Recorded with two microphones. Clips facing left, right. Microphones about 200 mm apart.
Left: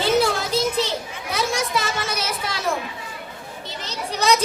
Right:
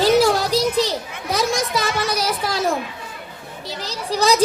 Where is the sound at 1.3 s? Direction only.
40° right (ahead or behind).